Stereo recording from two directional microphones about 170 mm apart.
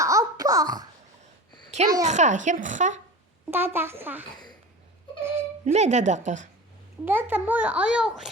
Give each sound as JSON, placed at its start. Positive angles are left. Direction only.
{"t": 0.0, "sound": "babbling", "side_deg": -20}
{"t": 2.0, "sound": "speech", "side_deg": -45}
{"t": 3.5, "sound": "a child's voice", "side_deg": -10}
{"t": 5.2, "sound": "a sound", "side_deg": -15}
{"t": 5.6, "sound": "speech", "side_deg": -40}
{"t": 7.0, "sound": "a child's voice", "side_deg": -10}